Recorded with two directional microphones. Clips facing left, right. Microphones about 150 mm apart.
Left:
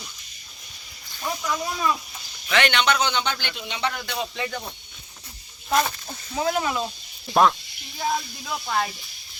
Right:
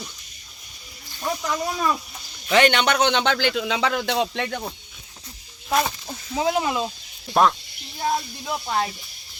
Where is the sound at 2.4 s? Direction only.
40° right (ahead or behind).